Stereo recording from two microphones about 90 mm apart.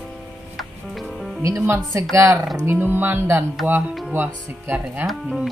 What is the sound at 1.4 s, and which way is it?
Speech, 30° right (ahead or behind).